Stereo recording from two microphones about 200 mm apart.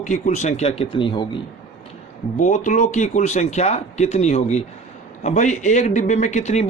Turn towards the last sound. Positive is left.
turn(degrees=35)  # may be behind; listen again after turning